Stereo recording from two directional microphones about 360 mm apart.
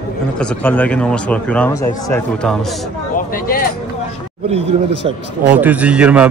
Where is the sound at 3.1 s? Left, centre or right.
Left.